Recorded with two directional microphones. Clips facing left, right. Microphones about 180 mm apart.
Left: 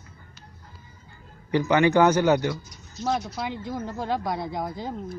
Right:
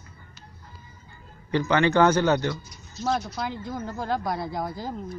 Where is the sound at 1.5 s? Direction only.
15° left (ahead or behind).